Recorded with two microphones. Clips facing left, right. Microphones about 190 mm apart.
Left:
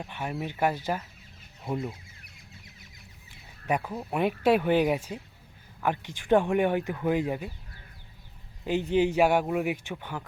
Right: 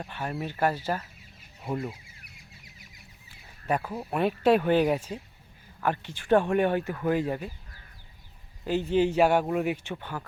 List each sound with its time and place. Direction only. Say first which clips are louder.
0.0 s speech: even; 10° left (ahead or behind)
1.7 s speech: even; 10° right (ahead or behind)
3.7 s speech: even; 10° left (ahead or behind)
8.6 s speech: even; 15° left (ahead or behind)